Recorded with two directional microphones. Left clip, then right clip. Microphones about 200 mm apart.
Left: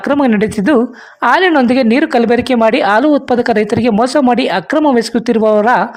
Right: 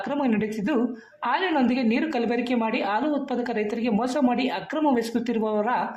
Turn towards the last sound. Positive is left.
turn(degrees=50)  # may be behind; listen again after turning